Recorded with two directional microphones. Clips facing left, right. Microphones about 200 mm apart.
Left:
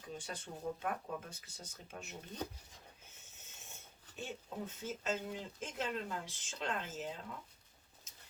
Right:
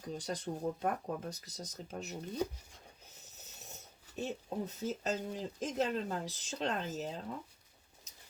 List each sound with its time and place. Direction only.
0.0 s speech: 40° right (ahead or behind)